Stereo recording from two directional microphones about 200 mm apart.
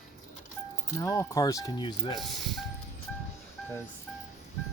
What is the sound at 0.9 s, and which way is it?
Speech, 15° left (ahead or behind).